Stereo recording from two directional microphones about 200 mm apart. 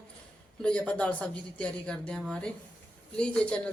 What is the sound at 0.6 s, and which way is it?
Speech, 5° left (ahead or behind).